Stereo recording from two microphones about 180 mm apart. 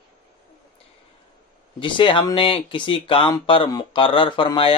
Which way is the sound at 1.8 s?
30° left (ahead or behind).